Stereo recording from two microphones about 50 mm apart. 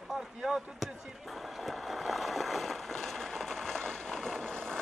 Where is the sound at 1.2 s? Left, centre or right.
Centre.